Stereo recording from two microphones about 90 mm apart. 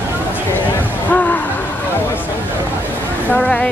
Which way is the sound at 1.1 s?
20° left (ahead or behind).